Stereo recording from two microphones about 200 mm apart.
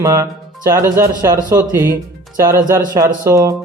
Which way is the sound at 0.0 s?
15° right (ahead or behind).